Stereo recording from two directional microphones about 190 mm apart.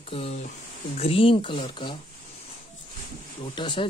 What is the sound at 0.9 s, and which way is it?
Speech, 30° left (ahead or behind).